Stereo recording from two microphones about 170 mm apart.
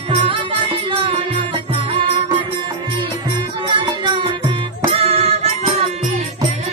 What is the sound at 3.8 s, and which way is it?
Music, 30° right (ahead or behind).